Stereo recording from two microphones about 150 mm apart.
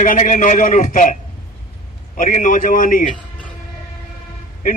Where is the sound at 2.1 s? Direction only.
60° left (ahead or behind).